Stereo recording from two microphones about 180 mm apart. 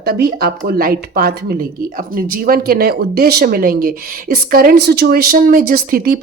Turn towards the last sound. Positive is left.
turn(degrees=-55)  # may be behind; listen again after turning